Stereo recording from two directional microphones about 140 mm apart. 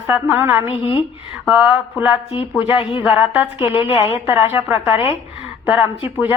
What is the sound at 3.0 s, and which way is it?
Speech, 10° right (ahead or behind).